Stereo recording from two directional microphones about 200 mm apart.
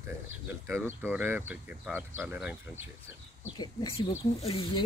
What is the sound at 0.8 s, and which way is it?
Speech, 10° right (ahead or behind).